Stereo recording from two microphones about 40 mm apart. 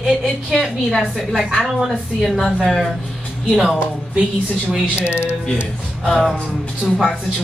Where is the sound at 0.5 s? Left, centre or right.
Centre.